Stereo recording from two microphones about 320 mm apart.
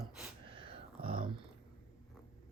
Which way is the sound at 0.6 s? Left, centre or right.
Centre.